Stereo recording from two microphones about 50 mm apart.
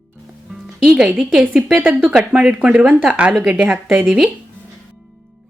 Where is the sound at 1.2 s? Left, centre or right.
Centre.